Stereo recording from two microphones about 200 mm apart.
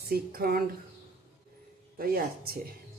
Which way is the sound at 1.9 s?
45° right (ahead or behind).